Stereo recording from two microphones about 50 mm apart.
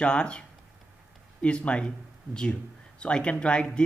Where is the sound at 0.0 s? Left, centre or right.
Left.